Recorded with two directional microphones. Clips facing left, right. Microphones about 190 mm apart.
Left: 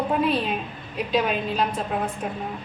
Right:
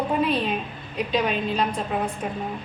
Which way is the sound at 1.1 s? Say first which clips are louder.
Left 1 dB; 5° left (ahead or behind).